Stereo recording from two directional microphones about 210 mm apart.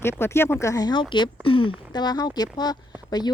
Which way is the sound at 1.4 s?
25° left (ahead or behind).